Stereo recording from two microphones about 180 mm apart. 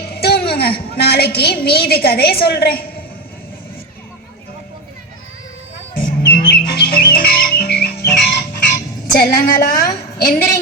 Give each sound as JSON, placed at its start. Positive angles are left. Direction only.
{"t": 0.2, "sound": "a woman's voice", "side_deg": 60}
{"t": 6.1, "sound": "music", "side_deg": 60}
{"t": 9.1, "sound": "a woman's voice", "side_deg": 55}